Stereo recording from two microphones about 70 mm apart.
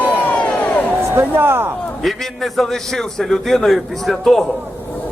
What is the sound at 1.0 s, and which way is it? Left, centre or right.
Speech, right.